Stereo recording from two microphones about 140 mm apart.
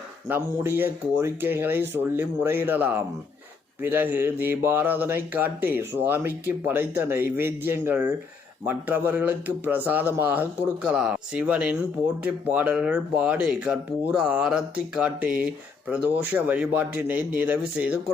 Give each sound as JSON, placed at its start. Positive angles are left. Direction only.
{"t": 0.3, "sound": "speech", "side_deg": -15}